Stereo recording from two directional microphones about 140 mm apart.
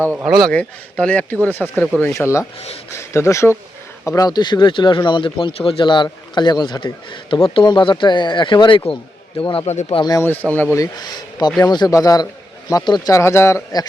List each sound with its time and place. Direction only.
0.0 s speech: 15° right (ahead or behind)
0.3 s speech: centre (ahead or behind)
1.7 s speech: centre (ahead or behind)
2.2 s speech: 10° left (ahead or behind); by 9.7 s 40° left (ahead or behind)
9.9 s speech: 30° left (ahead or behind)
10.5 s speech: 15° left (ahead or behind)
11.7 s speech: 25° left (ahead or behind)